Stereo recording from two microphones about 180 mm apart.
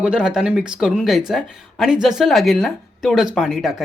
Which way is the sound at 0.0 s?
5° right (ahead or behind).